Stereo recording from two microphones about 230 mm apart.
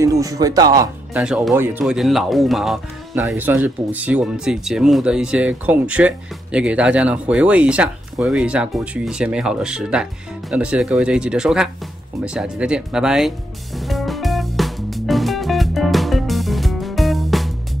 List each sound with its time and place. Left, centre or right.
0.0 s speech: centre
1.2 s speech: centre
13.7 s music: centre